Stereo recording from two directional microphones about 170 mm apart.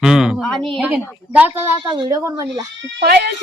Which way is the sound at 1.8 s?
25° right (ahead or behind).